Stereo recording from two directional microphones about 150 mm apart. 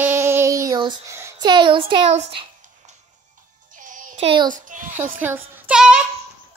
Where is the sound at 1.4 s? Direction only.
30° right (ahead or behind).